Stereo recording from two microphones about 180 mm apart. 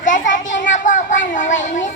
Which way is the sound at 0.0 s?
45° left (ahead or behind).